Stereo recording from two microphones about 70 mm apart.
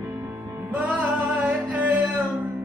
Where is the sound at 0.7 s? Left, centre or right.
Right.